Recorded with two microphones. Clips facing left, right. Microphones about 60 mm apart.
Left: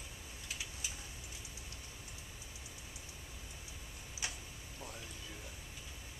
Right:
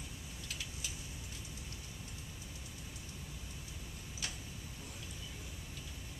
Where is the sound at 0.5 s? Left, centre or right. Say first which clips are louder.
Left 1 dB; centre.